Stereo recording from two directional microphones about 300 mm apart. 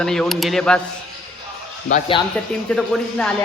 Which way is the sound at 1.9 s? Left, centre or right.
Centre.